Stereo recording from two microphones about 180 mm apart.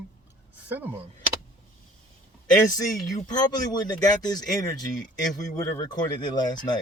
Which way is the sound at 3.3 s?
20° left (ahead or behind).